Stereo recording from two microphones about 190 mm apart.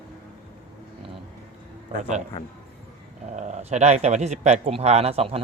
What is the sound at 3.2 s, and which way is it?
Speech, 40° right (ahead or behind).